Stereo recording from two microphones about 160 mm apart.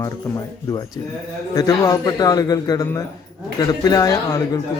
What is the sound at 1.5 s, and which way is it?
A man's voice, 20° left (ahead or behind).